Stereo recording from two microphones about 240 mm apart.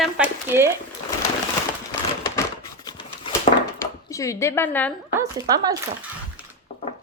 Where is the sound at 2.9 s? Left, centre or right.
Centre.